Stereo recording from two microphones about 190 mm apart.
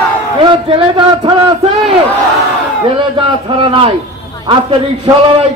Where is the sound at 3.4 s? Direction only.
25° right (ahead or behind).